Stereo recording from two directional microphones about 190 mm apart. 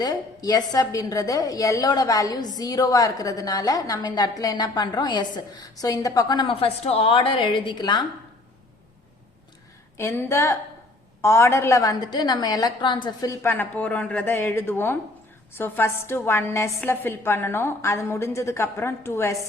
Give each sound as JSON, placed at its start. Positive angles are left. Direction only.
{"t": 0.0, "sound": "a woman's voice", "side_deg": 20}
{"t": 10.0, "sound": "a woman's voice", "side_deg": 15}